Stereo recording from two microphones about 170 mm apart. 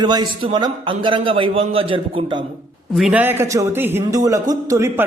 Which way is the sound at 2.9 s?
5° right (ahead or behind).